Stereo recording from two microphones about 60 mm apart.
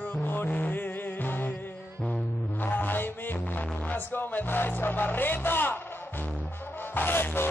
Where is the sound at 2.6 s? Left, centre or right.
Left.